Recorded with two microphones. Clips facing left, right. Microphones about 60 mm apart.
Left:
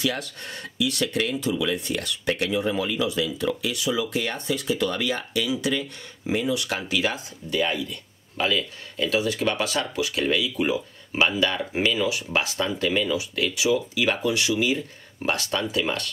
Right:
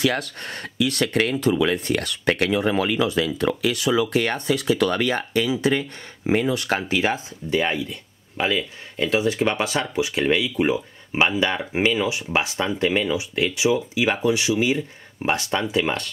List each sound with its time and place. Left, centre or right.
0.0 s speech: right
5.0 s speech: right
7.9 s speech: right